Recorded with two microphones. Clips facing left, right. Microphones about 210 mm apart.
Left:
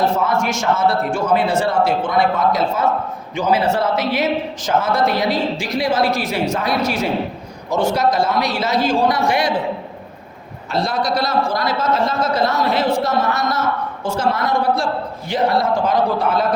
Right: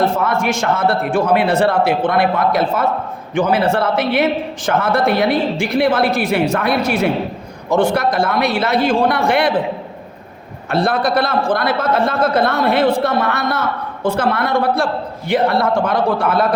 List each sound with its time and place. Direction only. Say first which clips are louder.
0.0 s a man's voice: right 1 dB; 55° right (ahead or behind)
10.7 s a man's voice: right 4 dB; 55° right (ahead or behind)